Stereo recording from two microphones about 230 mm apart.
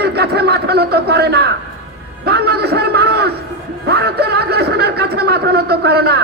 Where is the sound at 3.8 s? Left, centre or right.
Right.